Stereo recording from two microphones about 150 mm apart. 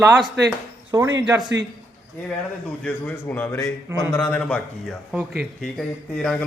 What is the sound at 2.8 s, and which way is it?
A man's voice, 10° left (ahead or behind).